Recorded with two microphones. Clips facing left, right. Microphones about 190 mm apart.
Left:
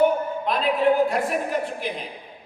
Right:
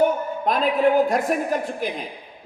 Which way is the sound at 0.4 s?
45° right (ahead or behind).